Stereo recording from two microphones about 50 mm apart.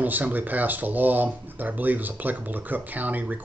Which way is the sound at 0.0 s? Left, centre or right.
Right.